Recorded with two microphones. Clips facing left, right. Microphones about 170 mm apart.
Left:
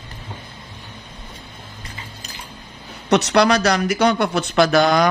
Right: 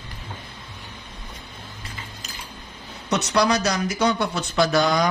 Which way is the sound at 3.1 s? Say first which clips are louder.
Left 5 dB; 70° left (ahead or behind).